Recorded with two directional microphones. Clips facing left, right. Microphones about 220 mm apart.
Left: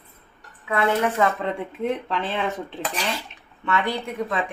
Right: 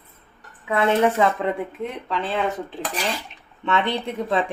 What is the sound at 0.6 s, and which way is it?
Speech, 20° right (ahead or behind).